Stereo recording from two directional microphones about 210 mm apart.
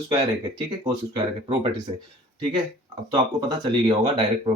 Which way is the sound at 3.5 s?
20° right (ahead or behind).